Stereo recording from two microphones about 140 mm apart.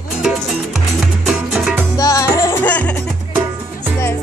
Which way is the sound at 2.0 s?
25° left (ahead or behind).